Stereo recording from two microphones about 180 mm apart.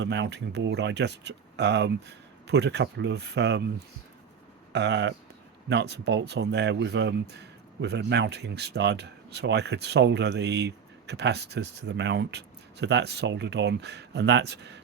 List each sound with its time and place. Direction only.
0.0 s speech: 80° right
4.7 s speech: 75° right (ahead or behind)